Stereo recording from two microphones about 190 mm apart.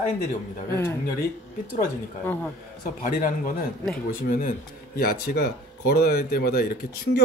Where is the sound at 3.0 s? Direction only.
45° left (ahead or behind).